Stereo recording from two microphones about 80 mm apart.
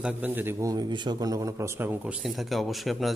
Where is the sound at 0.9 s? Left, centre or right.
Right.